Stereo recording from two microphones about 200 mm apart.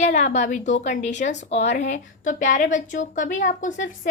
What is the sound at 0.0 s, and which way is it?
A woman's voice, 35° left (ahead or behind).